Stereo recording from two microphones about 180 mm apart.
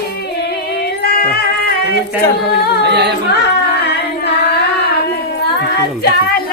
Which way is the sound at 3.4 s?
65° left (ahead or behind).